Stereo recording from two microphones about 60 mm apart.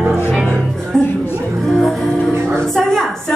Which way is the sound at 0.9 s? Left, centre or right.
Centre.